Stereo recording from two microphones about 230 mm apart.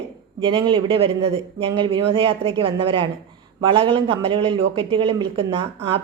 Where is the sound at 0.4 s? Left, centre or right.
Right.